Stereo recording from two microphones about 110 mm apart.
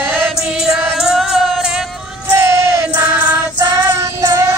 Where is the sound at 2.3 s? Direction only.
25° right (ahead or behind).